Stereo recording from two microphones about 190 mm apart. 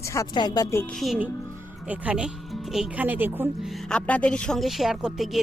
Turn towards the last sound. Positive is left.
turn(degrees=0)  # may be behind; listen again after turning